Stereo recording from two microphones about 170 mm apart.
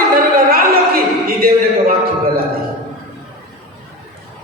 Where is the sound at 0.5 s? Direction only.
60° right (ahead or behind).